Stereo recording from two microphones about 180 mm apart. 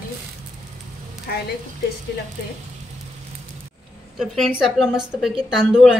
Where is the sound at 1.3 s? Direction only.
60° left (ahead or behind).